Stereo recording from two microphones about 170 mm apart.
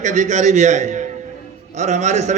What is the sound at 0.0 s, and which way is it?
A man's voice, 45° right (ahead or behind).